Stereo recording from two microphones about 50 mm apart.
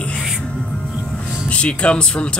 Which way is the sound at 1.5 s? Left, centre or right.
Left.